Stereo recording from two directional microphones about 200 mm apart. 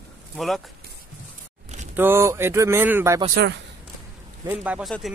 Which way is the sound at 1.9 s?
10° right (ahead or behind).